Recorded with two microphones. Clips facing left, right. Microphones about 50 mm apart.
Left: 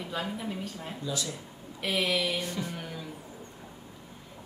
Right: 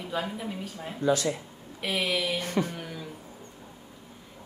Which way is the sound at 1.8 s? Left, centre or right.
Centre.